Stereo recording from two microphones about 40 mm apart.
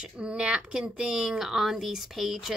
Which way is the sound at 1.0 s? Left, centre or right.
Centre.